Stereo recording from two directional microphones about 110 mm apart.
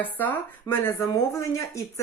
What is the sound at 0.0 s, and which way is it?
Speech, 15° left (ahead or behind).